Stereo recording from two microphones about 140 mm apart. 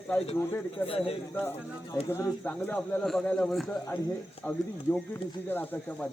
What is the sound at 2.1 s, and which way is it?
Speech, 25° left (ahead or behind).